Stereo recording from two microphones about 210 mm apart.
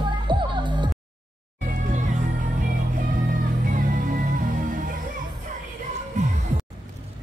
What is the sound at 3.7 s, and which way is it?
Music, 40° right (ahead or behind).